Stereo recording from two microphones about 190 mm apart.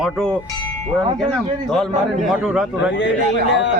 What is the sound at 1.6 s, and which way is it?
A man's voice, centre (ahead or behind).